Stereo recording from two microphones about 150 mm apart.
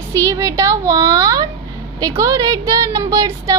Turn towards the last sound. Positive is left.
turn(degrees=-20)  # may be behind; listen again after turning